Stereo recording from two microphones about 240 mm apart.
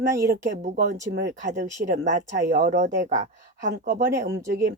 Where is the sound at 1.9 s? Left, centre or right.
Right.